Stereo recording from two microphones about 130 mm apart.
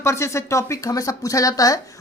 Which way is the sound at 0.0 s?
20° left (ahead or behind).